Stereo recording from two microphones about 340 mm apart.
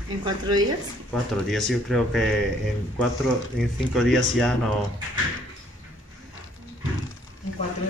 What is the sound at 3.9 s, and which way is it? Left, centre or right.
Speech, centre.